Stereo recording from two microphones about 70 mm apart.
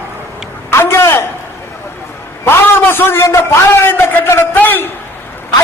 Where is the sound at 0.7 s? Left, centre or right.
Left.